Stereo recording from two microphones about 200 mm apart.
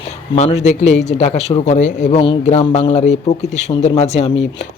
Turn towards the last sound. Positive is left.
turn(degrees=30)  # may be behind; listen again after turning